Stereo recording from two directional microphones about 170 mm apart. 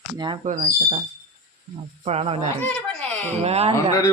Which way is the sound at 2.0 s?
40° right (ahead or behind).